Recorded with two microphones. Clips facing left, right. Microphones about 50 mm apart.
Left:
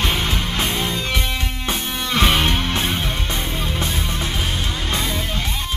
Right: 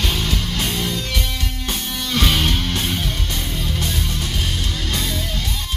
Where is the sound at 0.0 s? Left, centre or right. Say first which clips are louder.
Left 2 dB; left.